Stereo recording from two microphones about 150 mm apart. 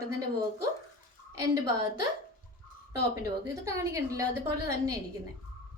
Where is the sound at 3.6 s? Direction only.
20° right (ahead or behind).